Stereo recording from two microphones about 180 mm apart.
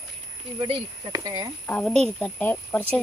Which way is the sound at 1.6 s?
5° left (ahead or behind).